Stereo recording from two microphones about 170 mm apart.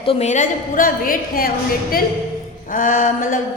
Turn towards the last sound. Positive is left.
turn(degrees=50)  # may be behind; listen again after turning